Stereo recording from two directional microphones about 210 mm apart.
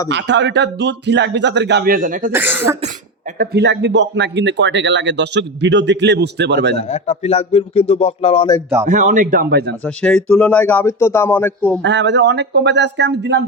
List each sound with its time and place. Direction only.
0.1 s speech: 60° right (ahead or behind); by 2.3 s 40° right (ahead or behind)
2.3 s speech: 10° right (ahead or behind)
3.3 s speech: 50° right (ahead or behind)
6.8 s speech: 30° left (ahead or behind)
8.8 s speech: 35° right (ahead or behind)
9.8 s a man's voice: 5° left (ahead or behind)
11.8 s speech: 60° right (ahead or behind)